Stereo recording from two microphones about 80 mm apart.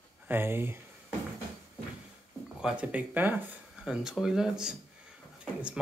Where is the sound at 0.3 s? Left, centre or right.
Right.